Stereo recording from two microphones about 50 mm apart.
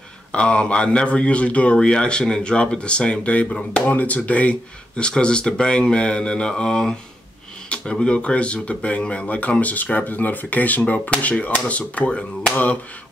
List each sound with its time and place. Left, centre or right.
0.3 s speech: left